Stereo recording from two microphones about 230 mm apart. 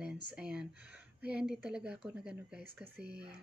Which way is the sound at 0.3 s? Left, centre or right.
Centre.